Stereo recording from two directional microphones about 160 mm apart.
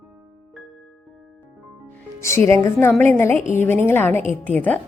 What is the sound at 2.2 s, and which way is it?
A woman's voice, 15° left (ahead or behind).